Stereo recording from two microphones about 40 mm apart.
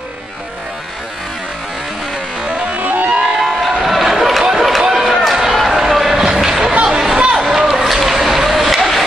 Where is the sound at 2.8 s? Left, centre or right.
Right.